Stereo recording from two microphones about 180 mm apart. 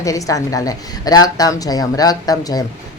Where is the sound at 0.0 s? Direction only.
20° left (ahead or behind).